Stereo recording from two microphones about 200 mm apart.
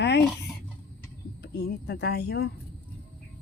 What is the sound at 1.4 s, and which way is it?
Speech, 50° left (ahead or behind).